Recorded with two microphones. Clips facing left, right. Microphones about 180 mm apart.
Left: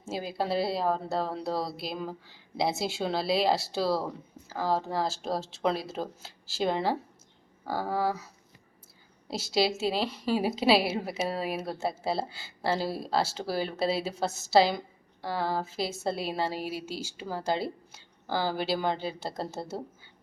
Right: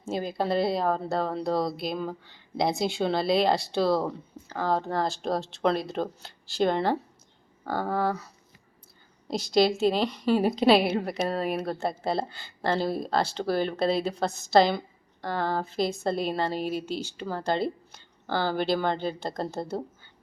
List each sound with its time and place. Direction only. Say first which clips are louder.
0.0 s a woman's voice: right 3 dB; 5° left (ahead or behind)
9.3 s a woman's voice: right 5 dB; 5° left (ahead or behind)